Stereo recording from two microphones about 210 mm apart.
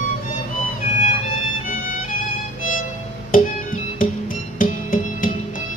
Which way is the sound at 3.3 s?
40° left (ahead or behind).